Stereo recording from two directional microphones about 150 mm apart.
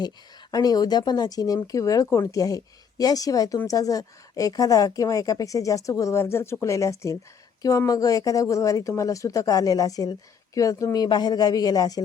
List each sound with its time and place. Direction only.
0.5 s speech: 25° left (ahead or behind)